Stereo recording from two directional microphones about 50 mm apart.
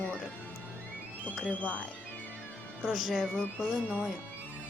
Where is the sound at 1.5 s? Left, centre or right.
Left.